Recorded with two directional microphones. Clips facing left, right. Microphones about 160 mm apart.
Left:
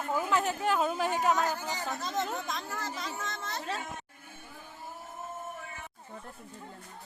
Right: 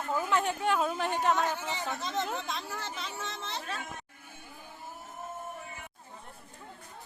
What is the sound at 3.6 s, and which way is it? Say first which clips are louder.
Speech: left 6 dB; 30° left (ahead or behind).